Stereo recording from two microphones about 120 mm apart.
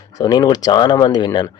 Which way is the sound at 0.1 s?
35° left (ahead or behind).